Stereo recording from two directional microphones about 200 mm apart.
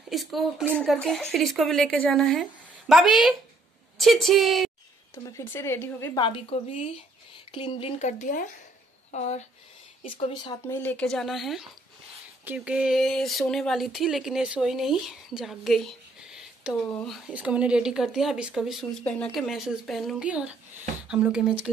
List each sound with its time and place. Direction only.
0.1 s speech: centre (ahead or behind)
5.1 s a woman's voice: 15° left (ahead or behind)
6.1 s a woman's voice: 25° left (ahead or behind)
10.0 s a woman's voice: 25° left (ahead or behind)
10.8 s speech: 5° left (ahead or behind)